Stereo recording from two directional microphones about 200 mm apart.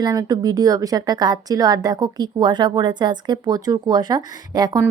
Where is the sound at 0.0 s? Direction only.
20° right (ahead or behind).